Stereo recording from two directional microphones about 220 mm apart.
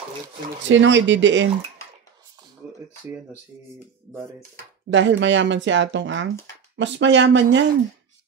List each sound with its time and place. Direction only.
0.7 s speech: 55° right (ahead or behind)
4.9 s speech: 55° right (ahead or behind)